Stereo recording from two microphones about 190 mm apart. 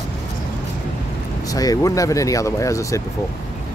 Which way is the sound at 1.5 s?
20° left (ahead or behind).